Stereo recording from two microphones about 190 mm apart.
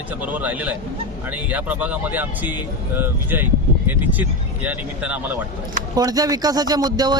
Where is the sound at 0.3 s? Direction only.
5° right (ahead or behind).